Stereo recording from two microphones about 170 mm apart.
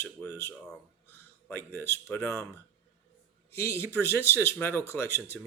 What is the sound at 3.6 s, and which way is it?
Speech, 15° left (ahead or behind).